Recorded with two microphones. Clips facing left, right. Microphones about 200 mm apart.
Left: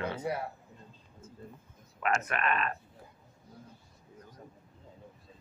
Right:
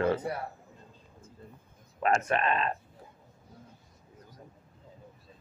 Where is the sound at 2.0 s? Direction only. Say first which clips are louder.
Right 4 dB; 30° right (ahead or behind).